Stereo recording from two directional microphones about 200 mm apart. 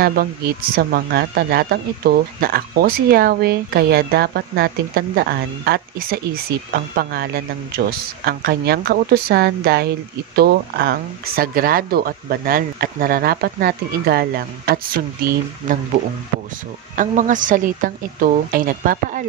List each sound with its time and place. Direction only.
0.0 s speech: 45° right (ahead or behind)